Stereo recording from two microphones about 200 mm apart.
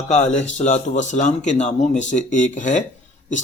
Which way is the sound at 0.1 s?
35° left (ahead or behind).